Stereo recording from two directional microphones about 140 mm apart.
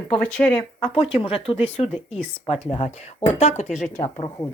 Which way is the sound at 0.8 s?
45° left (ahead or behind).